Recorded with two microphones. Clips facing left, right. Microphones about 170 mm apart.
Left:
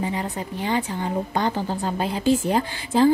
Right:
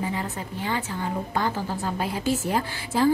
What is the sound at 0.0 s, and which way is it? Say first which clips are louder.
Speech: left 3 dB; 20° left (ahead or behind).